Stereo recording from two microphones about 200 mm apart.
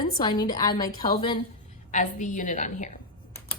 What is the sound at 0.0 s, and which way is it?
A woman's voice, 20° left (ahead or behind).